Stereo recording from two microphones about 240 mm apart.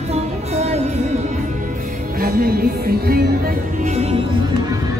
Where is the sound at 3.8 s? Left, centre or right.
Right.